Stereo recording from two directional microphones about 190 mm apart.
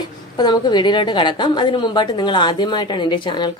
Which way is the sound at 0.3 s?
20° left (ahead or behind).